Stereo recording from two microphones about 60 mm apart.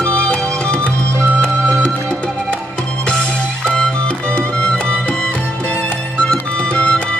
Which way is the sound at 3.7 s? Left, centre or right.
Centre.